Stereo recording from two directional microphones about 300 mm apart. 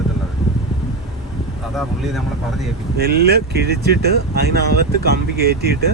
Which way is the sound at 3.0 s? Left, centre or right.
Right.